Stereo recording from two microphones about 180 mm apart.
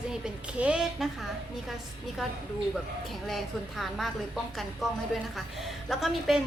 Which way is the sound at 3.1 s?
Centre (ahead or behind).